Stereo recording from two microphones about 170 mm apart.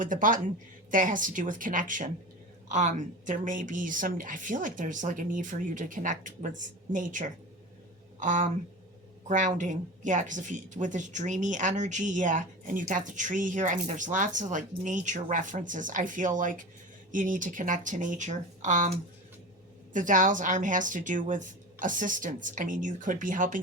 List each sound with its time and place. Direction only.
0.0 s a woman's voice: 50° right (ahead or behind)